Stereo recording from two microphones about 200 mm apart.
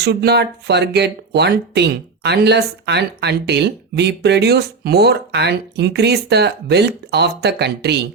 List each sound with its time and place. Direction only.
0.0 s speech: 55° right (ahead or behind)